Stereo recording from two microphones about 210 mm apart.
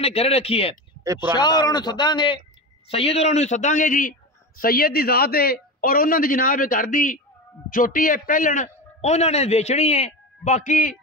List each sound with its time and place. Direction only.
0.0 s a man's voice: 30° left (ahead or behind)
1.0 s speech: 15° right (ahead or behind)
1.3 s a man's voice: 20° left (ahead or behind); by 11.0 s 40° left (ahead or behind)